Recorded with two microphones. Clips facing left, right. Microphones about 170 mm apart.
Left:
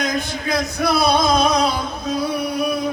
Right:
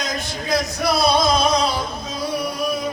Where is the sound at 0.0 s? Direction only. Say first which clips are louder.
Left 4 dB; 55° left (ahead or behind).